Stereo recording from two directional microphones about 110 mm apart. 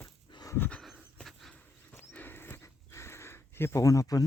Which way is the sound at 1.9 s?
20° left (ahead or behind).